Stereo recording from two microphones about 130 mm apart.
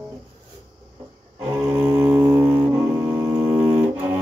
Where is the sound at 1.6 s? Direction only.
25° right (ahead or behind).